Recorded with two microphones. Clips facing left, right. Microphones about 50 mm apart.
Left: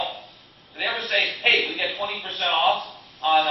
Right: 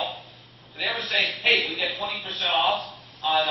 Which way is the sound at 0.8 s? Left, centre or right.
Centre.